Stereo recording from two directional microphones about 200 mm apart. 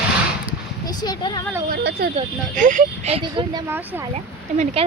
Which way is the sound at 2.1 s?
40° right (ahead or behind).